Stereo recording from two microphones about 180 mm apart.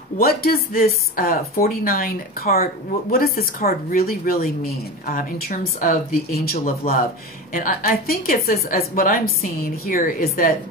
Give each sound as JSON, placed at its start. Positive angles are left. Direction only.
{"t": 0.2, "sound": "speech", "side_deg": 55}